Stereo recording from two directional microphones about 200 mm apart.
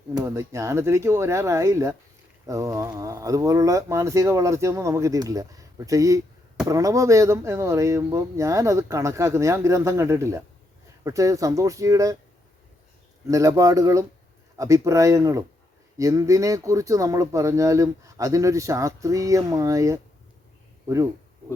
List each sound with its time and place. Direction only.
0.1 s speech: 15° right (ahead or behind)
13.2 s speech: 15° right (ahead or behind)